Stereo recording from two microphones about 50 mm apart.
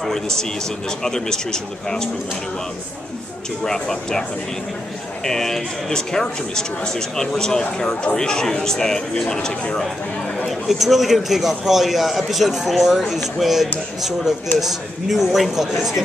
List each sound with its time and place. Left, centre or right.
0.0 s a man's voice: centre
3.6 s a man's voice: centre
5.2 s a man's voice: centre
10.5 s a man's voice: centre